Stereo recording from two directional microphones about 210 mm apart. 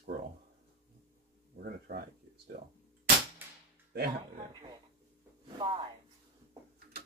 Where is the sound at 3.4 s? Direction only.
10° right (ahead or behind).